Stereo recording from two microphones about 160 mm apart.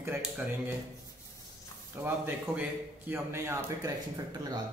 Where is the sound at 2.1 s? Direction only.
10° right (ahead or behind).